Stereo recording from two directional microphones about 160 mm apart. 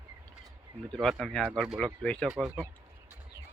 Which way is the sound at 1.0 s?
Centre (ahead or behind).